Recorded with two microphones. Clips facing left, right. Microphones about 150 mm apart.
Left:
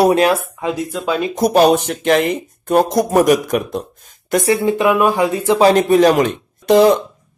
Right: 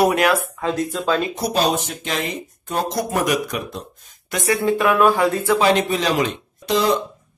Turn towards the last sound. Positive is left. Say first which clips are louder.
# left 8 dB
turn(degrees=60)  # may be behind; listen again after turning